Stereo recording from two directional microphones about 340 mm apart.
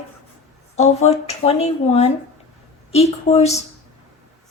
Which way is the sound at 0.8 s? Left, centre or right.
Centre.